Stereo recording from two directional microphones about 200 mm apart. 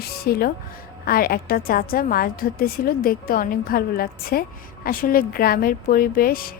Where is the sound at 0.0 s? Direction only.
50° left (ahead or behind).